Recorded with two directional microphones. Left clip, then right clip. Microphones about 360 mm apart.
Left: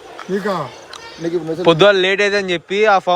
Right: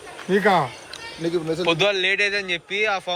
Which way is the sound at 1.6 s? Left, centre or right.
Left.